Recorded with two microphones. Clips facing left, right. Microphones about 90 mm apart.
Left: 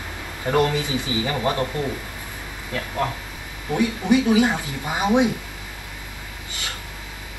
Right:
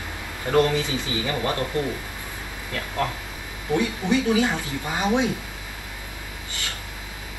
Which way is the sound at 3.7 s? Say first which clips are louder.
Left 3 dB; 20° left (ahead or behind).